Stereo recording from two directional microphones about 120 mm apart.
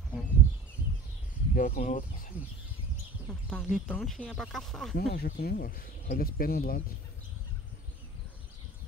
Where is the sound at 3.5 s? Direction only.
5° right (ahead or behind).